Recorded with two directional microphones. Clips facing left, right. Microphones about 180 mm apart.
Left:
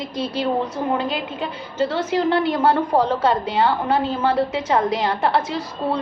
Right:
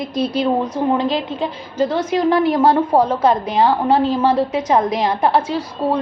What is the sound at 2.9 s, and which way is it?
Speech, 10° right (ahead or behind).